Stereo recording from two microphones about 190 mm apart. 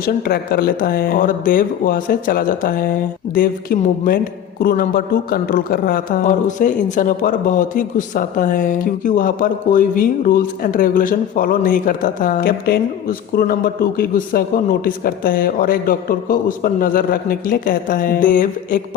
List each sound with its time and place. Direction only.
0.0 s a man's voice: 50° left (ahead or behind)